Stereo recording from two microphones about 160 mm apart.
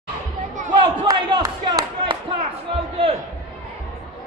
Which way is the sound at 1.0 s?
20° right (ahead or behind).